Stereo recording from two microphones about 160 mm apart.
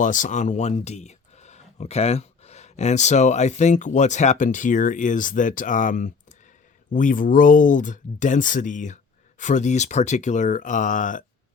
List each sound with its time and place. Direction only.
0.0 s speech: 55° left (ahead or behind)